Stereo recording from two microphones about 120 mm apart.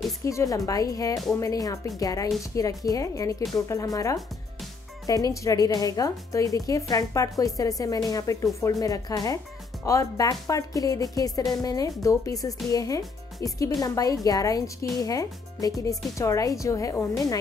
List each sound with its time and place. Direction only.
0.2 s a woman's voice: 25° left (ahead or behind)